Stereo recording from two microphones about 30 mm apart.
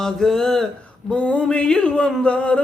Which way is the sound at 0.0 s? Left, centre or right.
Centre.